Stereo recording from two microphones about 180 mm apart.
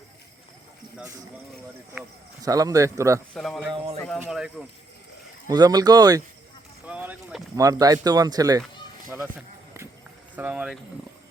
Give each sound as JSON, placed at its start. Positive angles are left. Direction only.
{"t": 2.4, "sound": "speech", "side_deg": -20}
{"t": 3.3, "sound": "a man's voice", "side_deg": 0}
{"t": 3.7, "sound": "speech", "side_deg": -35}
{"t": 4.3, "sound": "a man's voice", "side_deg": 0}
{"t": 5.5, "sound": "speech", "side_deg": -20}
{"t": 6.8, "sound": "speech", "side_deg": -10}
{"t": 9.0, "sound": "speech", "side_deg": -5}
{"t": 10.3, "sound": "speech", "side_deg": -10}